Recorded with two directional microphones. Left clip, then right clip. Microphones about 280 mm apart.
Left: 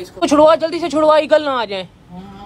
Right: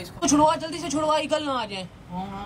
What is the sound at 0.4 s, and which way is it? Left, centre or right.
A man's voice, left.